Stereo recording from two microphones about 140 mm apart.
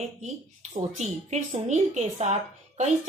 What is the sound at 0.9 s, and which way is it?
Speech, 55° right (ahead or behind).